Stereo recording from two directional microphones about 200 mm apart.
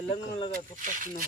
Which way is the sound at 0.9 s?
40° right (ahead or behind).